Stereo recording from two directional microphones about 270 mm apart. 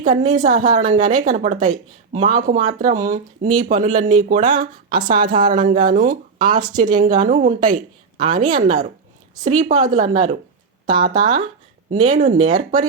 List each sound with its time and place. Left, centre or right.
0.0 s a woman's voice: right